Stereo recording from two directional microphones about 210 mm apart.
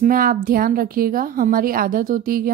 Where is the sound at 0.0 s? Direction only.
40° right (ahead or behind).